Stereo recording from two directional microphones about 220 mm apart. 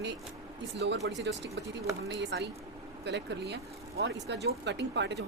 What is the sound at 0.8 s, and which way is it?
Speech, 50° right (ahead or behind).